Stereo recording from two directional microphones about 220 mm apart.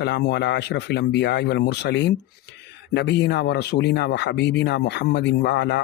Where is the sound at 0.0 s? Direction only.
50° left (ahead or behind).